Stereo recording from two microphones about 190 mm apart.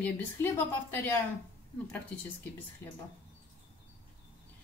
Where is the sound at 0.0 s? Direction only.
10° left (ahead or behind).